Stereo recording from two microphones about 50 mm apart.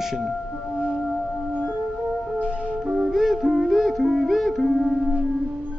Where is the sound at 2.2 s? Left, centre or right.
Centre.